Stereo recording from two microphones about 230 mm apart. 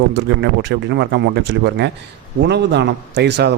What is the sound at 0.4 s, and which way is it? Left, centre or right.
Speech, right.